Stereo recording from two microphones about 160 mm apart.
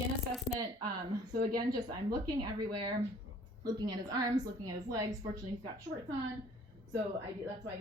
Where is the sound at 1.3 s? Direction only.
70° right (ahead or behind).